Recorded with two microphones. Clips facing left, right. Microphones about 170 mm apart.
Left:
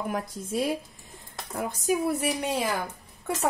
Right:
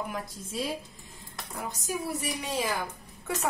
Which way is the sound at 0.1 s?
55° left (ahead or behind).